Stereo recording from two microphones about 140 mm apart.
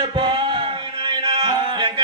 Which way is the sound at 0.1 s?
35° right (ahead or behind).